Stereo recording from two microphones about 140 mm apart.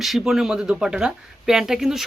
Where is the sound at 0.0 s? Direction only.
Centre (ahead or behind).